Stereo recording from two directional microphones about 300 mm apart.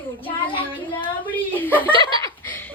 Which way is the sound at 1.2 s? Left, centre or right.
Centre.